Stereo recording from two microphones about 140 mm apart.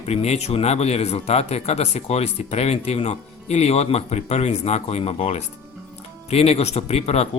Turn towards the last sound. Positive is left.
turn(degrees=50)  # may be behind; listen again after turning